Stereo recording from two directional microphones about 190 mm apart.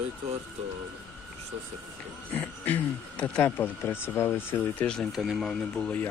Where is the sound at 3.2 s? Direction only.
10° left (ahead or behind).